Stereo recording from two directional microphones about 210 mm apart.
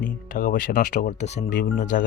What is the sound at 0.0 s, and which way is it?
Speech, 40° left (ahead or behind).